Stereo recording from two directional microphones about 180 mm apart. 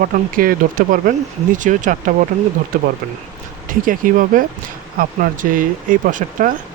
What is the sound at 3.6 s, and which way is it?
Speech, 50° right (ahead or behind).